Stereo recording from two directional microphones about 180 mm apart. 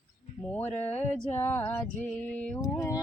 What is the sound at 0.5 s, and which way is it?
Speech, 10° left (ahead or behind).